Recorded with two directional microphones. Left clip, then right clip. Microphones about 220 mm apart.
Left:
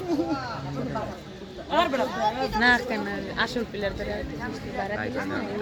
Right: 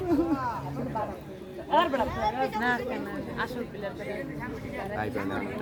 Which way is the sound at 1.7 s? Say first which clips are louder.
Left 1 dB; 55° left (ahead or behind).